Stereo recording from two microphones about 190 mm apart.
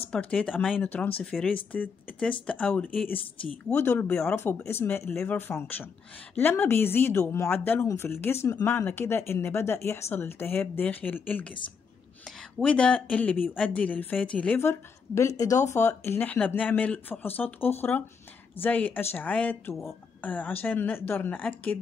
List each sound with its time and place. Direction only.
0.1 s speech: 5° left (ahead or behind)
12.5 s speech: 5° left (ahead or behind)